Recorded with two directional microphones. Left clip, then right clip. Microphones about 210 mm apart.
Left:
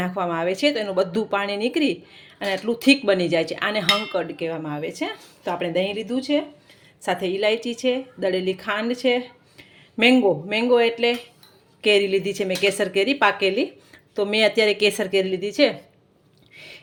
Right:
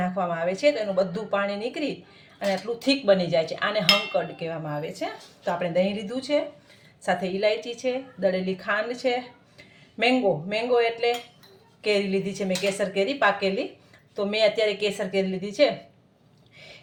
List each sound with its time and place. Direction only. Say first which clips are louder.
0.0 s speech: left 2 dB; 45° left (ahead or behind)